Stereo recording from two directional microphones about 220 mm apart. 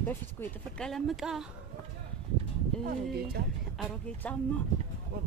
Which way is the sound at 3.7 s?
5° left (ahead or behind).